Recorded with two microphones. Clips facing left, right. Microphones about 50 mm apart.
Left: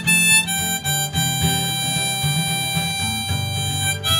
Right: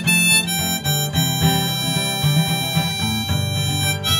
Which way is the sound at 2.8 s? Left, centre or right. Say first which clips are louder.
Right 2 dB; centre.